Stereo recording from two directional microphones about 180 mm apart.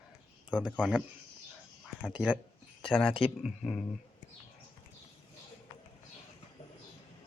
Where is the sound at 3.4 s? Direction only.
Centre (ahead or behind).